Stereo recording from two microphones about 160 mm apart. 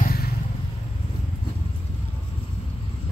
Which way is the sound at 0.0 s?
70° left (ahead or behind).